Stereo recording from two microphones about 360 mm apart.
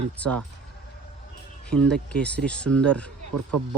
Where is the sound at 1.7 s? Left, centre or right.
Centre.